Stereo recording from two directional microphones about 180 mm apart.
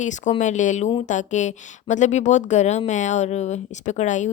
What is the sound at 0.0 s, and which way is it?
Speech, 40° left (ahead or behind).